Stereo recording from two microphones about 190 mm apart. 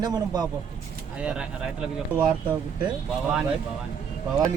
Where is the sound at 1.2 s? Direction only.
5° right (ahead or behind).